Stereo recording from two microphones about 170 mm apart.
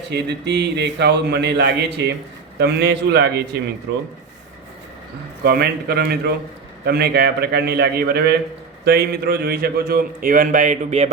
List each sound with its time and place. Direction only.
0.1 s speech: 85° right
2.6 s a man's voice: 80° right
5.4 s a man's voice: 70° right (ahead or behind); by 11.1 s 45° right (ahead or behind)